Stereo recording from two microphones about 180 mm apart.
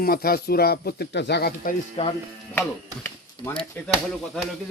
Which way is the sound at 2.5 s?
10° left (ahead or behind).